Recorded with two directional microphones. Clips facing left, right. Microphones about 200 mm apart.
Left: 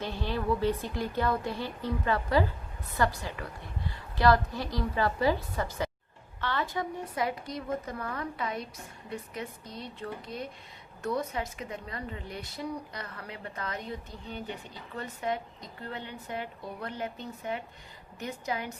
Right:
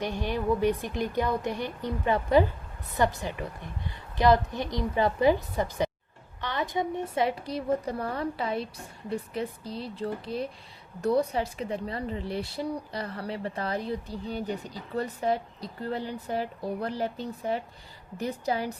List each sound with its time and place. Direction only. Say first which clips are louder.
0.0 s a woman's voice: right 3 dB; 15° right (ahead or behind); by 18.8 s 35° right (ahead or behind)